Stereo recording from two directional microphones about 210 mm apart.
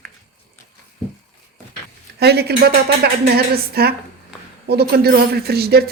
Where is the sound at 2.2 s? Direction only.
50° right (ahead or behind).